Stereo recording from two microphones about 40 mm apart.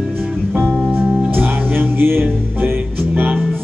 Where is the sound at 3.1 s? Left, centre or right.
Right.